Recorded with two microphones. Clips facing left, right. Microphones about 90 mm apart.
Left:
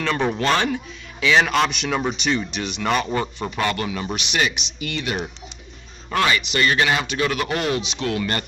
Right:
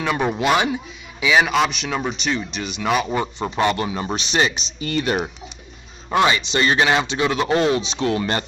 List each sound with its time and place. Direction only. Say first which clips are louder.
0.0 s speech: right 1 dB; 10° right (ahead or behind)
3.3 s a man's voice: right 4 dB; 20° right (ahead or behind)
6.0 s a man's voice: right 3 dB; 20° right (ahead or behind)